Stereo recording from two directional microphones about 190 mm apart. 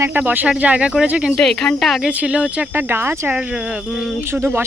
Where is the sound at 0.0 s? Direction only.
10° right (ahead or behind).